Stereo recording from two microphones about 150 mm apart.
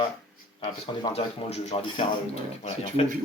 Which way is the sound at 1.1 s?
45° left (ahead or behind).